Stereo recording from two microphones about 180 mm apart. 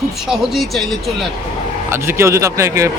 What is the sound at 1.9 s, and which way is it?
Speech, 15° right (ahead or behind).